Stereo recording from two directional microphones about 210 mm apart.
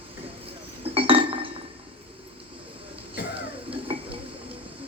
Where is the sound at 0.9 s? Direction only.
25° right (ahead or behind).